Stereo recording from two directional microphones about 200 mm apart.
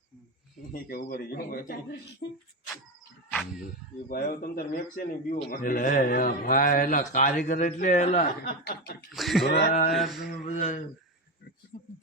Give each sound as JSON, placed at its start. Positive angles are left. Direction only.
{"t": 0.7, "sound": "speech", "side_deg": 45}
{"t": 4.1, "sound": "speech", "side_deg": 45}
{"t": 9.1, "sound": "speech", "side_deg": 0}
{"t": 9.5, "sound": "speech", "side_deg": 50}
{"t": 9.9, "sound": "speech", "side_deg": 0}
{"t": 10.4, "sound": "speech", "side_deg": 35}
{"t": 11.7, "sound": "a sound", "side_deg": 40}